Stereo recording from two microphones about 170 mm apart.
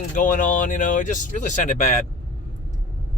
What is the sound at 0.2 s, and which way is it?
Speech, 50° left (ahead or behind).